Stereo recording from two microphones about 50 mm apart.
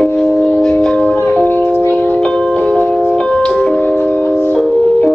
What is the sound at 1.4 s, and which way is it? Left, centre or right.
Music, left.